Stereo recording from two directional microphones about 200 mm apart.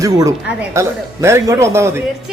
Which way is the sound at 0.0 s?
15° right (ahead or behind).